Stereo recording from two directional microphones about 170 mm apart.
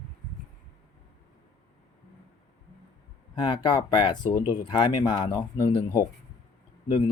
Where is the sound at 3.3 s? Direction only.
25° left (ahead or behind).